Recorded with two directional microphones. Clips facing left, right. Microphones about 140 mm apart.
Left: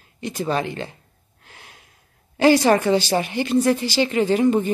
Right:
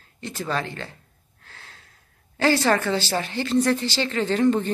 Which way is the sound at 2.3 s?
15° left (ahead or behind).